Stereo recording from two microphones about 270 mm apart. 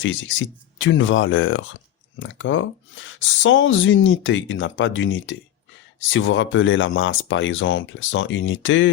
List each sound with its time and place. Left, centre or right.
0.0 s speech: left